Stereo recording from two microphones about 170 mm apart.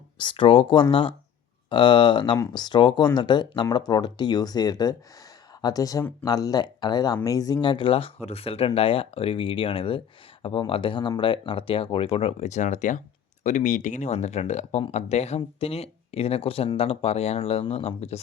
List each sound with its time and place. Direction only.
0.2 s speech: 30° left (ahead or behind)